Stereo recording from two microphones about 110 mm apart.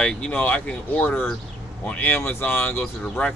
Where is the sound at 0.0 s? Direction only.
10° left (ahead or behind).